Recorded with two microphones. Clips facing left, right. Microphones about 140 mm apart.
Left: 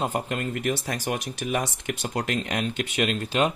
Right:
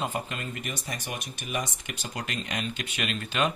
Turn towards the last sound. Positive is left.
turn(degrees=40)  # may be behind; listen again after turning